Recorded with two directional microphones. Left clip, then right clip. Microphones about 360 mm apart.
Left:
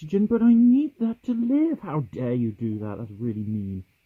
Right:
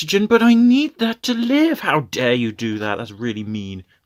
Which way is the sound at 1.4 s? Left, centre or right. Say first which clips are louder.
Right 6 dB; centre.